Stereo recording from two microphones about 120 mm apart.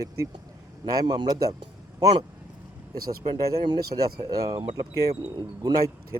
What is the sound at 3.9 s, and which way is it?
Speech, 30° right (ahead or behind).